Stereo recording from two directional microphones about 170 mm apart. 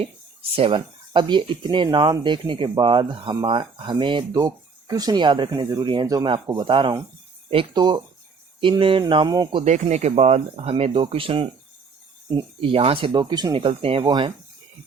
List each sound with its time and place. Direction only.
0.5 s speech: 30° right (ahead or behind)
9.6 s speech: 45° right (ahead or behind); by 14.3 s 25° right (ahead or behind)